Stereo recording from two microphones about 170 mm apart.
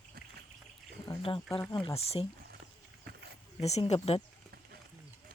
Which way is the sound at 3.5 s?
40° left (ahead or behind).